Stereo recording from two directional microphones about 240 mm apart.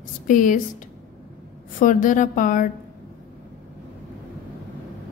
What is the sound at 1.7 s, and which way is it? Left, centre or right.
Speech, left.